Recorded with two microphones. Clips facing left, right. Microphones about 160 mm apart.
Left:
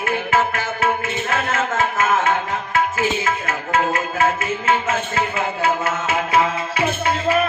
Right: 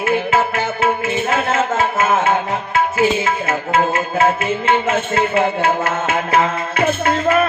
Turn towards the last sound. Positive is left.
turn(degrees=-55)  # may be behind; listen again after turning